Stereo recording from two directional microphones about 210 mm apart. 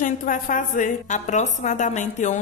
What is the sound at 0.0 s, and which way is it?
A woman's voice, 40° left (ahead or behind).